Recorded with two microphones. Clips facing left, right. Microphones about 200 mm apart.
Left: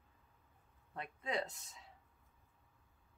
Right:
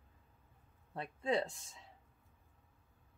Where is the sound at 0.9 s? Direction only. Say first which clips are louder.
Right 6 dB; 30° right (ahead or behind).